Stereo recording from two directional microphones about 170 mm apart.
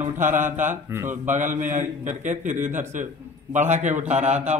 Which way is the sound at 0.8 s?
15° right (ahead or behind).